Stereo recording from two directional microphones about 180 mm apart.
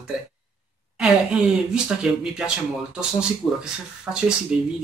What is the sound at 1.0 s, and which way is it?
Speech, 5° right (ahead or behind).